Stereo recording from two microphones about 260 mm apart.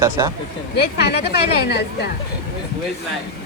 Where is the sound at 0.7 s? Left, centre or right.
Left.